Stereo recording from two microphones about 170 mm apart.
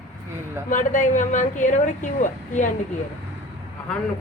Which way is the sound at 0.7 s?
50° left (ahead or behind).